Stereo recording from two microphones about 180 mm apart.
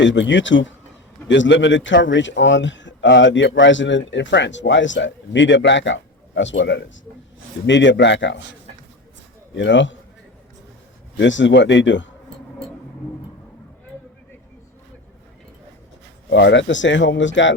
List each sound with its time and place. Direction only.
0.0 s speech: 90° left
9.6 s speech: 90° left
11.2 s speech: 90° left
16.3 s speech: 80° left